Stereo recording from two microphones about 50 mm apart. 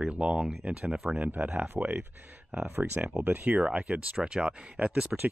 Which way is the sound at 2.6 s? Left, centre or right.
Right.